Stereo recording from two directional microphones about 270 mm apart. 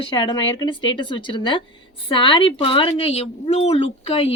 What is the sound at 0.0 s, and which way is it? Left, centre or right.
Speech, centre.